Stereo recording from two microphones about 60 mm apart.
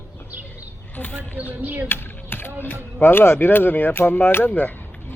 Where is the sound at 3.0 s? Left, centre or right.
Left.